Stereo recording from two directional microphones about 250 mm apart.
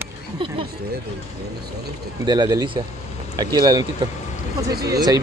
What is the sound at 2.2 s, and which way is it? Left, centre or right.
Speech, centre.